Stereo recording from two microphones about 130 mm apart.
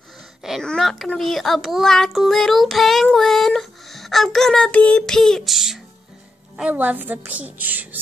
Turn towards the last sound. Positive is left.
turn(degrees=-15)  # may be behind; listen again after turning